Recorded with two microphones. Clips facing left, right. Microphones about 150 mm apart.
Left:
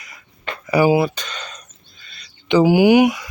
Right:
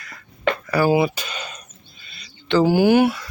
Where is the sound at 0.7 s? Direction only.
20° left (ahead or behind).